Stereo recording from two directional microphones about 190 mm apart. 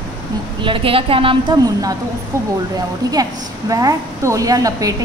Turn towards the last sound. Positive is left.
turn(degrees=-20)  # may be behind; listen again after turning